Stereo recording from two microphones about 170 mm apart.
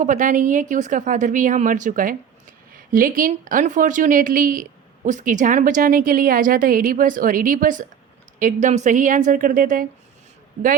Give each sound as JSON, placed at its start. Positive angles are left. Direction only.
{"t": 0.0, "sound": "a woman's voice", "side_deg": -50}